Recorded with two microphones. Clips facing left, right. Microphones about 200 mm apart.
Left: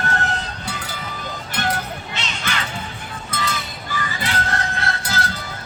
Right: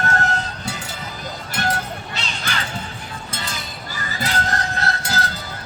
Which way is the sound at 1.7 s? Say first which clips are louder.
Even; 35° right (ahead or behind).